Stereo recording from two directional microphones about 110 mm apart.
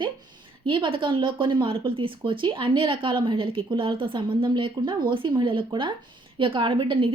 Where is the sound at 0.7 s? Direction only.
50° right (ahead or behind).